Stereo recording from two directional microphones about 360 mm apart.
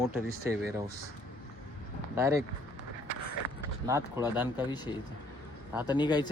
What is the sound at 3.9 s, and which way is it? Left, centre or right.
Speech, centre.